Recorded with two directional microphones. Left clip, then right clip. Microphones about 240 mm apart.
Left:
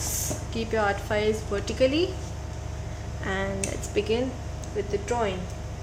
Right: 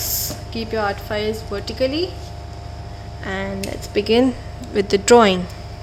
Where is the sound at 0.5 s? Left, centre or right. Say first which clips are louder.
Right 3 dB; centre.